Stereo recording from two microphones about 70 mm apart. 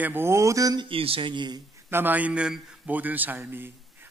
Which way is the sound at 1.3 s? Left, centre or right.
Right.